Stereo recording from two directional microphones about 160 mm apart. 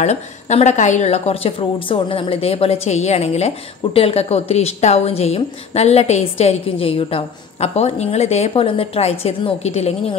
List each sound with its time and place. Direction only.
0.0 s a woman's voice: 45° left (ahead or behind)